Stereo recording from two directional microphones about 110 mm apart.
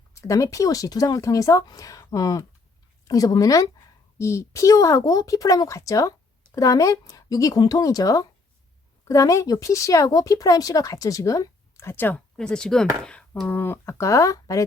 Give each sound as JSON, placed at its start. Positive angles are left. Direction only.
{"t": 0.1, "sound": "a woman's voice", "side_deg": 30}
{"t": 12.4, "sound": "speech", "side_deg": 10}
{"t": 13.5, "sound": "speech", "side_deg": 20}